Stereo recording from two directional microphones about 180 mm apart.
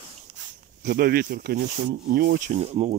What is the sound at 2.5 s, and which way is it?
Speech, 40° right (ahead or behind).